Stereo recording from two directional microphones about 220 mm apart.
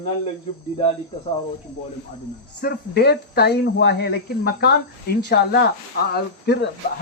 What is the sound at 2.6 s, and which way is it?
Speech, 45° left (ahead or behind).